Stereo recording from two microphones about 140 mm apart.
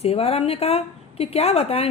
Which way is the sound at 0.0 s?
45° left (ahead or behind).